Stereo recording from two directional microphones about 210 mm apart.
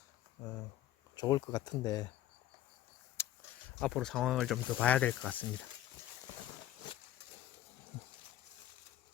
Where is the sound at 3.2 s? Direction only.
10° left (ahead or behind).